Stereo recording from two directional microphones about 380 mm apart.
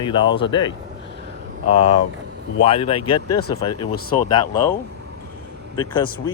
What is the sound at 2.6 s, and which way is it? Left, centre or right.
Speech, centre.